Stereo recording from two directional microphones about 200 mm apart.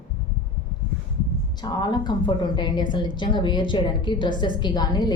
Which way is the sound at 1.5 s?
20° left (ahead or behind).